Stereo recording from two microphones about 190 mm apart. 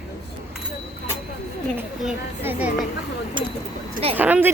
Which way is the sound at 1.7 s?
5° right (ahead or behind).